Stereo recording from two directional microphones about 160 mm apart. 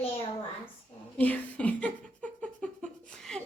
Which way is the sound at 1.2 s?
10° left (ahead or behind).